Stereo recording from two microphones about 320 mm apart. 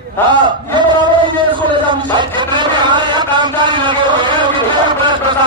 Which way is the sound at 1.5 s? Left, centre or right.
Centre.